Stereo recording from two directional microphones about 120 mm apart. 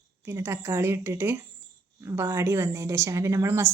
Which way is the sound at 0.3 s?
20° right (ahead or behind).